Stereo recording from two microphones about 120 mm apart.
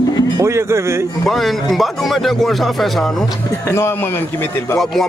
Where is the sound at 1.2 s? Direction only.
Centre (ahead or behind).